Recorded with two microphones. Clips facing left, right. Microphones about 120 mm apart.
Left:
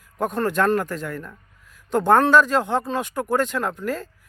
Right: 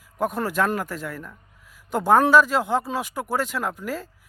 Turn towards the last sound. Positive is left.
turn(degrees=-5)  # may be behind; listen again after turning